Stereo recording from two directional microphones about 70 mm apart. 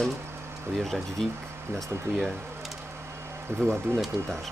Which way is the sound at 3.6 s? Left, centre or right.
Right.